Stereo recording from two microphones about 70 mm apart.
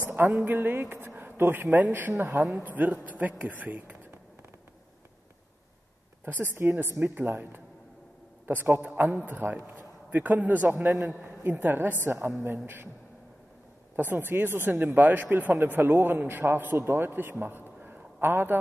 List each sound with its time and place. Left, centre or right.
0.0 s a sound: right
0.3 s speech: right
6.2 s speech: right
13.9 s a man's voice: right